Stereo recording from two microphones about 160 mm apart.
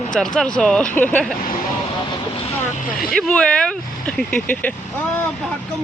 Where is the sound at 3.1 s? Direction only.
5° left (ahead or behind).